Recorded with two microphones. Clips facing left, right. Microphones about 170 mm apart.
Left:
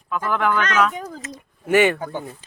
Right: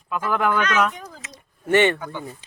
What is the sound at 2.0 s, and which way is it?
Speech, 45° left (ahead or behind).